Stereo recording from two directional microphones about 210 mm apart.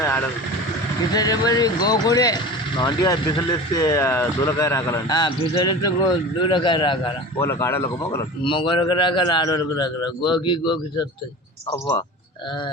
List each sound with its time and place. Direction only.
0.0 s vehicle: 10° left (ahead or behind)
1.1 s speech: 20° left (ahead or behind)
7.3 s speech: 10° left (ahead or behind)
8.4 s speech: 25° left (ahead or behind)